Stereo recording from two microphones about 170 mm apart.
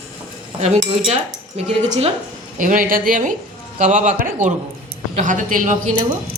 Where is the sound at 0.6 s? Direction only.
40° right (ahead or behind).